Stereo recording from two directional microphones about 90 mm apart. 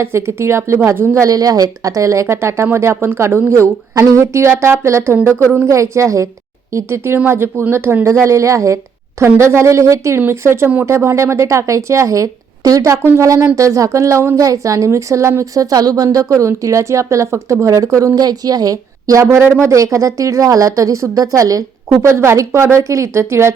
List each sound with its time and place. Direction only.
0.0 s a woman's voice: 30° right (ahead or behind)